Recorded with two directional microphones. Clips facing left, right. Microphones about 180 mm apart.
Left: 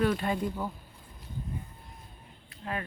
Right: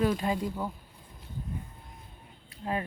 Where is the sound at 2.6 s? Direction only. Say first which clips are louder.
Right 3 dB; 25° right (ahead or behind).